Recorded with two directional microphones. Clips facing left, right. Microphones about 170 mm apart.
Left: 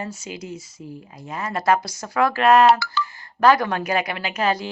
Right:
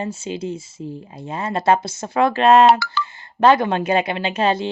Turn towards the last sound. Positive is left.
turn(degrees=-25)  # may be behind; listen again after turning